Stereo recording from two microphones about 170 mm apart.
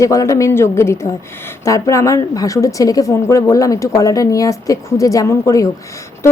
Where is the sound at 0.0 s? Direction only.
20° left (ahead or behind).